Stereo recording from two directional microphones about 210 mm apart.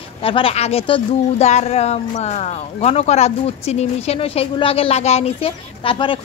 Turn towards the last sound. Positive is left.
turn(degrees=25)  # may be behind; listen again after turning